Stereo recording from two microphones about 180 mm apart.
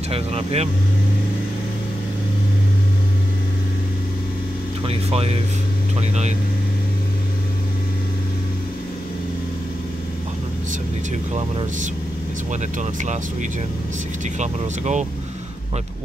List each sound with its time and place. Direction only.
0.1 s speech: 35° right (ahead or behind)
4.8 s speech: 35° right (ahead or behind)
11.3 s speech: 35° right (ahead or behind)